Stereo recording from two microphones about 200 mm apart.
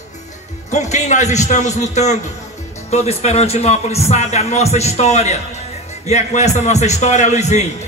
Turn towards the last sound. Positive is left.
turn(degrees=35)  # may be behind; listen again after turning